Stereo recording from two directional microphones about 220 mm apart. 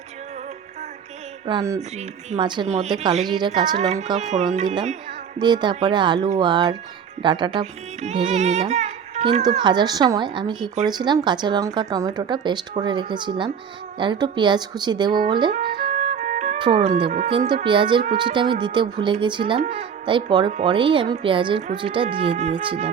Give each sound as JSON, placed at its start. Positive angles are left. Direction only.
{"t": 1.5, "sound": "music", "side_deg": -20}
{"t": 2.0, "sound": "speech", "side_deg": -25}
{"t": 3.8, "sound": "speech", "side_deg": -30}
{"t": 9.4, "sound": "speech", "side_deg": -20}
{"t": 15.5, "sound": "music", "side_deg": -45}
{"t": 16.6, "sound": "speech", "side_deg": -20}